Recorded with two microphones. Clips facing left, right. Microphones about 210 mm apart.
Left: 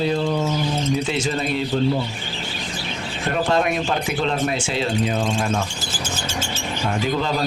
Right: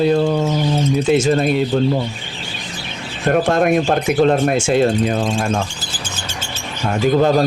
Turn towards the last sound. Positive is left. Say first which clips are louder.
# right 9 dB
turn(degrees=-50)  # may be behind; listen again after turning